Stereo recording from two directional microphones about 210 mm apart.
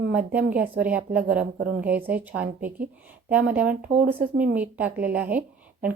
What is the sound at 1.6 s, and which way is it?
Speech, 50° right (ahead or behind).